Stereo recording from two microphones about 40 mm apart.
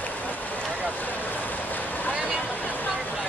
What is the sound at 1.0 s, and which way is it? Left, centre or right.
Vehicle, left.